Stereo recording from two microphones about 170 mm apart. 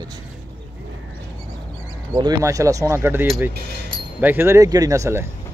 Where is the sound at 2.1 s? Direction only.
20° right (ahead or behind).